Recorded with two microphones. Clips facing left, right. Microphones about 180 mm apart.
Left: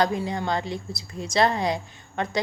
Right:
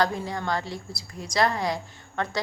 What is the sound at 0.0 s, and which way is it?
A woman's voice, 20° left (ahead or behind).